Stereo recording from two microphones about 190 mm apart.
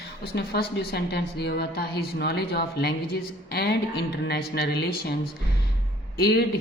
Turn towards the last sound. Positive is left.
turn(degrees=55)  # may be behind; listen again after turning